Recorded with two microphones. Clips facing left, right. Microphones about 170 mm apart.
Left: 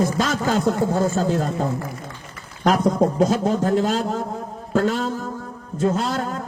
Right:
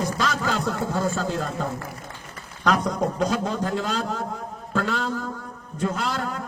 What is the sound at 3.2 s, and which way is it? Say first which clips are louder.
Speech: left 6 dB; 45° left (ahead or behind).